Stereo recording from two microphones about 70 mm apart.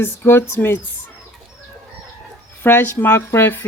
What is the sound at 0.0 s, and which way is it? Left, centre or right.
Speech, left.